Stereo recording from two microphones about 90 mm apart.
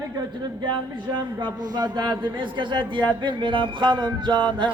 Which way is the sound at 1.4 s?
50° right (ahead or behind).